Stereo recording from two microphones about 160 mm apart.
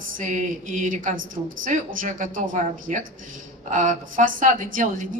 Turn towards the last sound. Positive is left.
turn(degrees=-55)  # may be behind; listen again after turning